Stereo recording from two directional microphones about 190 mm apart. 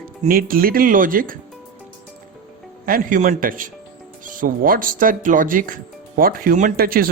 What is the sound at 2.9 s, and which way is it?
Speech, 45° right (ahead or behind).